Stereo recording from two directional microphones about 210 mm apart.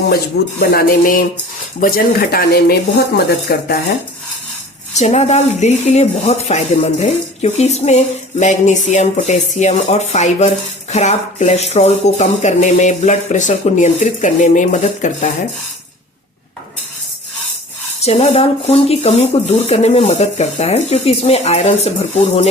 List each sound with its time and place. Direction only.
0.6 s speech: 45° left (ahead or behind)
4.9 s speech: 30° left (ahead or behind)
18.0 s speech: 30° left (ahead or behind)